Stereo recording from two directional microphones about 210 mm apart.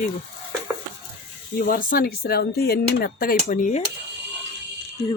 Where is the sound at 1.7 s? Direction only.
45° left (ahead or behind).